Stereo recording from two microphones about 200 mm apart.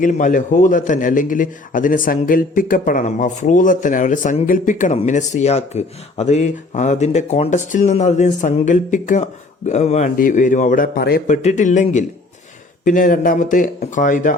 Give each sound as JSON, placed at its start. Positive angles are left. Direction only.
{"t": 0.0, "sound": "a man's voice", "side_deg": 40}
{"t": 11.4, "sound": "a man's voice", "side_deg": 40}